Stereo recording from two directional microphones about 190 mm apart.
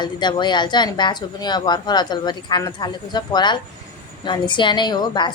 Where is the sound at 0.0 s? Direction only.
25° left (ahead or behind).